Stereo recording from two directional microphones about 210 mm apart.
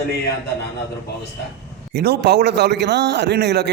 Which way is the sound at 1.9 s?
50° right (ahead or behind).